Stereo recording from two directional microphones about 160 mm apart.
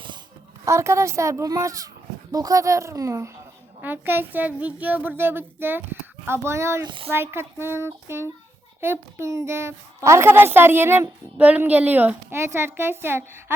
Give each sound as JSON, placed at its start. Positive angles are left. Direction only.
{"t": 0.6, "sound": "a woman's voice", "side_deg": -20}
{"t": 6.8, "sound": "speech", "side_deg": -30}
{"t": 7.1, "sound": "a woman's voice", "side_deg": -15}